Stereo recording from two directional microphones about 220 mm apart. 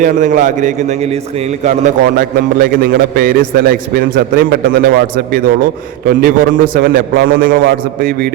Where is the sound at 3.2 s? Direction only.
40° right (ahead or behind).